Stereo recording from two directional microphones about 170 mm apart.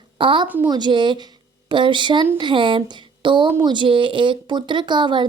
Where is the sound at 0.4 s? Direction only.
10° right (ahead or behind).